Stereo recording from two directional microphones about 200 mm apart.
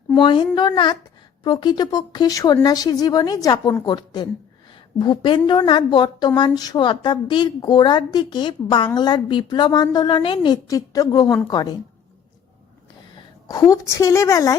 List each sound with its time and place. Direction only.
0.2 s a woman's voice: 20° left (ahead or behind)
13.5 s a woman's voice: 15° left (ahead or behind)